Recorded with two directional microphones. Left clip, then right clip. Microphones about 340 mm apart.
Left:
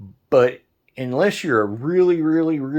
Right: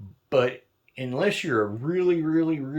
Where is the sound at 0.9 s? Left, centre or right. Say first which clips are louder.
Left 6 dB; centre.